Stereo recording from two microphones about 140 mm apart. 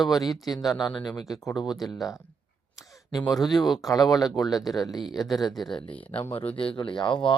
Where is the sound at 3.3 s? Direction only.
Centre (ahead or behind).